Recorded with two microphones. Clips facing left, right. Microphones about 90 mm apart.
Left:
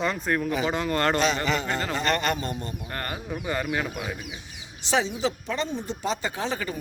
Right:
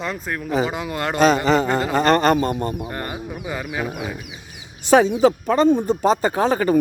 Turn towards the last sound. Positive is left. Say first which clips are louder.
# right 12 dB
turn(degrees=-45)  # may be behind; listen again after turning